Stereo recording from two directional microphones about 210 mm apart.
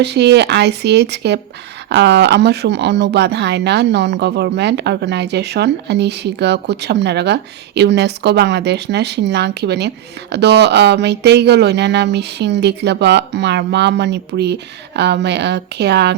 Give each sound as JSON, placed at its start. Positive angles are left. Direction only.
{"t": 0.0, "sound": "speech", "side_deg": -55}